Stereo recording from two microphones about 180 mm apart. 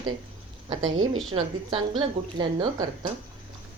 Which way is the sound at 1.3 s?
30° right (ahead or behind).